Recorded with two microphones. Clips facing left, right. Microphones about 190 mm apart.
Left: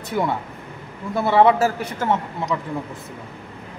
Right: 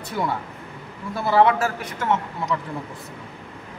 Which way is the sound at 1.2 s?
25° left (ahead or behind).